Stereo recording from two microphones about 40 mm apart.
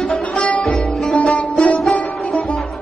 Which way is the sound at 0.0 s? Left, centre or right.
Centre.